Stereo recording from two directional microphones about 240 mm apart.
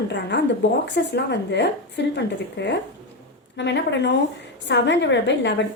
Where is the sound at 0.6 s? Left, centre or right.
Left.